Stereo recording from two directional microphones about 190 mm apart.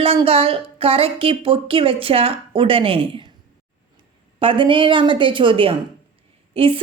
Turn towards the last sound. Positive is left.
turn(degrees=-30)  # may be behind; listen again after turning